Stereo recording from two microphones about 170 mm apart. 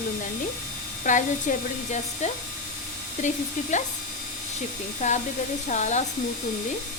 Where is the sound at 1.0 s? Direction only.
45° left (ahead or behind).